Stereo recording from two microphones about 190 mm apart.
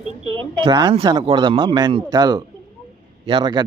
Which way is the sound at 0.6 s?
25° right (ahead or behind).